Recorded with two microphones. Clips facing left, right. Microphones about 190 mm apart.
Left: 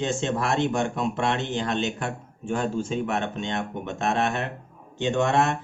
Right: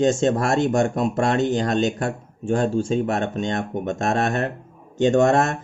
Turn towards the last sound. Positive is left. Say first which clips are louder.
# right 5 dB
turn(degrees=-45)  # may be behind; listen again after turning